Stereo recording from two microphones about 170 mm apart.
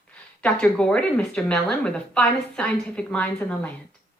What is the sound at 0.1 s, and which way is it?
A woman's voice, 5° left (ahead or behind).